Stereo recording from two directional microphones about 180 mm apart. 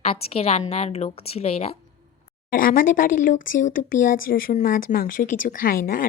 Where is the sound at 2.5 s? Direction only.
50° left (ahead or behind).